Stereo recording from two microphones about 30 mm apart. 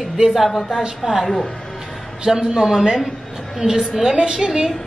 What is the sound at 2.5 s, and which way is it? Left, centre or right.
A woman's voice, centre.